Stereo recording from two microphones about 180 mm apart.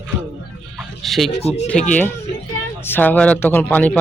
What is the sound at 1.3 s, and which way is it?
Speech, 35° left (ahead or behind).